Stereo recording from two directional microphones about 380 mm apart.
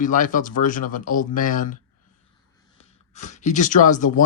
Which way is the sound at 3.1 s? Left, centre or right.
Centre.